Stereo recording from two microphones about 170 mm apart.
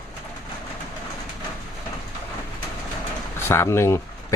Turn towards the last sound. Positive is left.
turn(degrees=15)  # may be behind; listen again after turning